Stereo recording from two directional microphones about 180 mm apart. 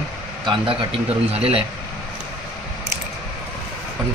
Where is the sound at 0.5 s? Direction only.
30° right (ahead or behind).